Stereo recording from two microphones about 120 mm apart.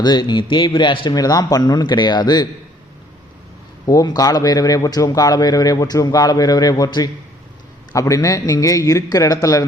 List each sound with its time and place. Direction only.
0.0 s a man's voice: 35° left (ahead or behind)
3.8 s a man's voice: 30° left (ahead or behind)